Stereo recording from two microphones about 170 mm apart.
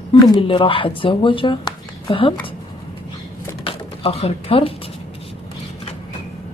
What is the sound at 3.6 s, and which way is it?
Typing, 35° left (ahead or behind).